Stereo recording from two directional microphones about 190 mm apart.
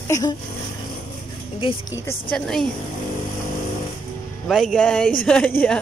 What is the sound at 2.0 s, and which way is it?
Speech, 10° left (ahead or behind).